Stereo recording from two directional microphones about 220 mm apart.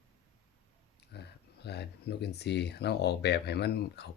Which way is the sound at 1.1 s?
50° left (ahead or behind).